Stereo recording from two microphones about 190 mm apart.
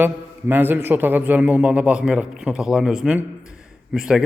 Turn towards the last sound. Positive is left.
turn(degrees=-5)  # may be behind; listen again after turning